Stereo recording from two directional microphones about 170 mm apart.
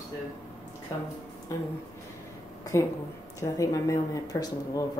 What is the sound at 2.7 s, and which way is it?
A woman's voice, 15° left (ahead or behind).